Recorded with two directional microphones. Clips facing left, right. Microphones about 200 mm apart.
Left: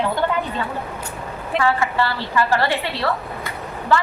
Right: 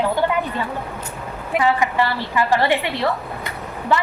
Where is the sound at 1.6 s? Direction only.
15° right (ahead or behind).